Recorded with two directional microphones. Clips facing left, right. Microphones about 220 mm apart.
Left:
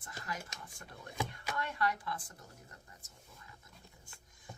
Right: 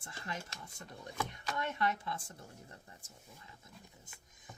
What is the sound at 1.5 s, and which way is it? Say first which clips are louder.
Speech: right 1 dB; 20° right (ahead or behind).